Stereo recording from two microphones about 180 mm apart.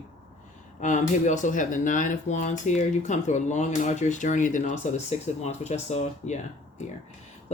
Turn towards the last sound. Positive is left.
turn(degrees=40)  # may be behind; listen again after turning